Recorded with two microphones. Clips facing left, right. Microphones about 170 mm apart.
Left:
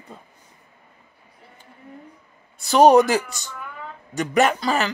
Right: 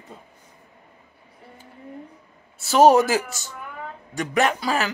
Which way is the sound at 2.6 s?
5° right (ahead or behind).